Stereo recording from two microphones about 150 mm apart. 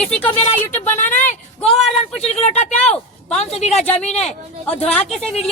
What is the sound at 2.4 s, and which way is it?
Speech, 50° left (ahead or behind).